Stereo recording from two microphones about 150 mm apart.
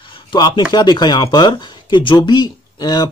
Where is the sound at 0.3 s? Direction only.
30° left (ahead or behind).